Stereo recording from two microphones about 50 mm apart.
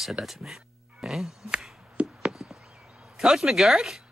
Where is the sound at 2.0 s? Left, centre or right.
Right.